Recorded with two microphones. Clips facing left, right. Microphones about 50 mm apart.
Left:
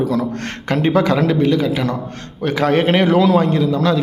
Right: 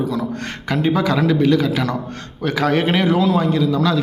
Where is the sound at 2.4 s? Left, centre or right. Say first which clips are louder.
Left 2 dB; left.